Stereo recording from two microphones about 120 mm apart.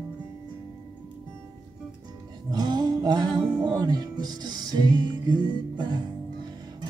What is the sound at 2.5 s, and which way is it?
Music, 35° right (ahead or behind).